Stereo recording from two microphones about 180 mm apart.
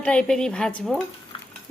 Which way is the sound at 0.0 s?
5° left (ahead or behind).